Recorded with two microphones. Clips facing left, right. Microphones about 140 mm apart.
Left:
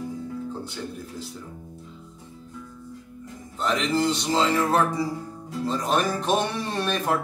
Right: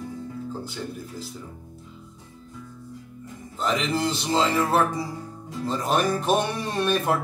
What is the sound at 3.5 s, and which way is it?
Speech, centre (ahead or behind).